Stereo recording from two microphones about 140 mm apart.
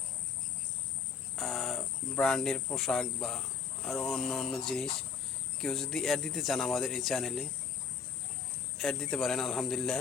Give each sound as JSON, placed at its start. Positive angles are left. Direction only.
{"t": 1.4, "sound": "speech", "side_deg": 0}
{"t": 8.8, "sound": "speech", "side_deg": 5}